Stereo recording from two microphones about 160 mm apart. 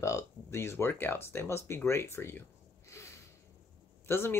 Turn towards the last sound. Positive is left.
turn(degrees=15)  # may be behind; listen again after turning